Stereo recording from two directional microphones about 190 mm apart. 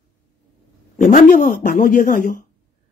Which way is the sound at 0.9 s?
45° left (ahead or behind).